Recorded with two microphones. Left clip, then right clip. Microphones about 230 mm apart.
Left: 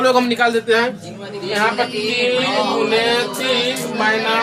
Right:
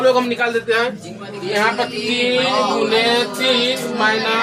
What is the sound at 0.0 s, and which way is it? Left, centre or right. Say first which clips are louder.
Speech: left 1 dB; left.